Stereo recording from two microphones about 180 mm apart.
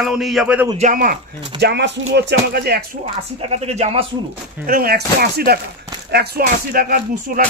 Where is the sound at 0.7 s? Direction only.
50° right (ahead or behind).